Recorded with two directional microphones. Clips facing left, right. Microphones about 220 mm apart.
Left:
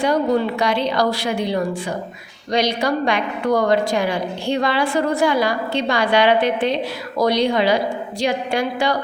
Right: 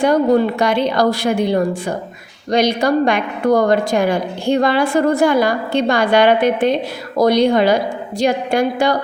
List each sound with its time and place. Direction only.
0.0 s a woman's voice: 50° right (ahead or behind)